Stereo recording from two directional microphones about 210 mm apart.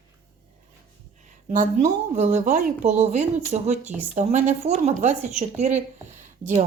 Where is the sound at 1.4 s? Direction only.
35° right (ahead or behind).